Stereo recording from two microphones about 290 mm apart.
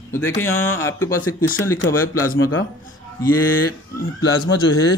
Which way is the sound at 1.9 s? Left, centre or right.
Centre.